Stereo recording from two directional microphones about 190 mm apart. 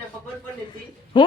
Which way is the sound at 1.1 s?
25° left (ahead or behind).